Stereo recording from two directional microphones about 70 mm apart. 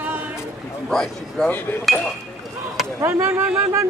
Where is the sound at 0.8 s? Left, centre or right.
Centre.